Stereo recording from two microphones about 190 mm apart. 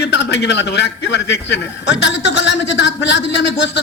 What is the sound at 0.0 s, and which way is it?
A man's voice, 65° left (ahead or behind).